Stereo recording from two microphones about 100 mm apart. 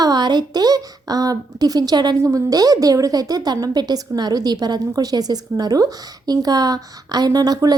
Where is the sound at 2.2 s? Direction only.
35° right (ahead or behind).